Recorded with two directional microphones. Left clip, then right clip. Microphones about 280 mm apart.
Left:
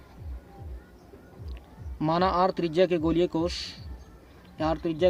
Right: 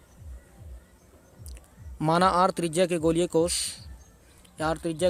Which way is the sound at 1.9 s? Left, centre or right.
Right.